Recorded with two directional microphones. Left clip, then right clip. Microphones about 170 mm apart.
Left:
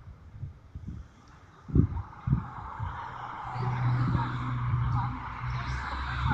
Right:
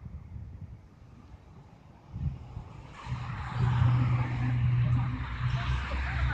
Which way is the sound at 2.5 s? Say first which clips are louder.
Left 12 dB; 40° left (ahead or behind).